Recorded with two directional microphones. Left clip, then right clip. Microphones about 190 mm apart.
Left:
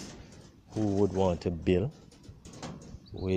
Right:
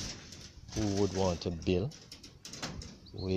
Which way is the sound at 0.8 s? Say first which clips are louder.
Left 4 dB; 15° left (ahead or behind).